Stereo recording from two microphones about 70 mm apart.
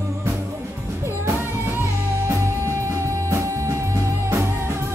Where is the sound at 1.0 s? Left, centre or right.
Right.